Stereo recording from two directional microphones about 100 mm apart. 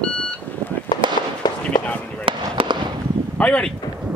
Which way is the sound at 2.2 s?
55° right (ahead or behind).